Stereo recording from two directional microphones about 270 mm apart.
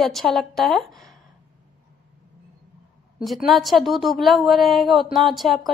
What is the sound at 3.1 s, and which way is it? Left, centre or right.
A woman's voice, centre.